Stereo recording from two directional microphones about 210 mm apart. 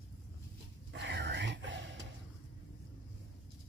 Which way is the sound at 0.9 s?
55° right (ahead or behind).